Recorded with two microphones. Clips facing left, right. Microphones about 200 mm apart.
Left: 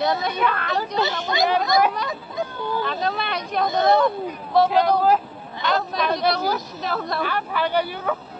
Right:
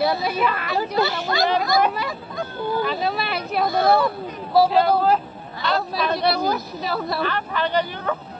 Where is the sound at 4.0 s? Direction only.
5° right (ahead or behind).